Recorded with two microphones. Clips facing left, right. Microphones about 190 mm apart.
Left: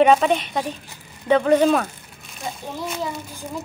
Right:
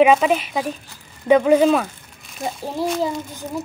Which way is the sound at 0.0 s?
5° right (ahead or behind).